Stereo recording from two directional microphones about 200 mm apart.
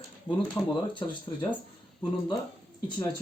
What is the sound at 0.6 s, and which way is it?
Speech, 15° left (ahead or behind).